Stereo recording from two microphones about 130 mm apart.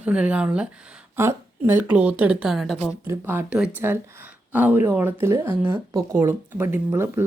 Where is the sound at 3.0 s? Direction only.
15° right (ahead or behind).